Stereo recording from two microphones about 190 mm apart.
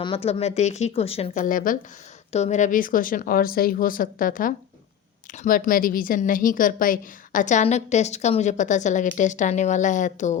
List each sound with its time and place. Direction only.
0.0 s a woman's voice: 30° left (ahead or behind)